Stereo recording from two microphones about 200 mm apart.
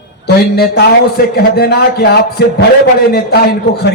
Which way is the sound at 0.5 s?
55° left (ahead or behind).